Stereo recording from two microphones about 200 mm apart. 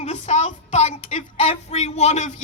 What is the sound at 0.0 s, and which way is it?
Speech, 35° left (ahead or behind).